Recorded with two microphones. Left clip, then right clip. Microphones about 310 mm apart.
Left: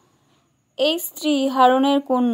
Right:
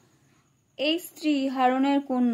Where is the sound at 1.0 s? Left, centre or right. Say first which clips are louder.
Left 6 dB; left.